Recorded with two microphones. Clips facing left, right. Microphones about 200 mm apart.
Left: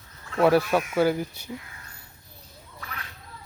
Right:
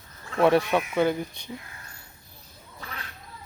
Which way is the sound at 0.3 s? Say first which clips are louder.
Left 1 dB; centre (ahead or behind).